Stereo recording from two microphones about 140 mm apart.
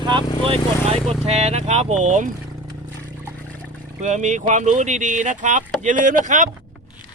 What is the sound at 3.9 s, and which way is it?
Speech, 60° right (ahead or behind).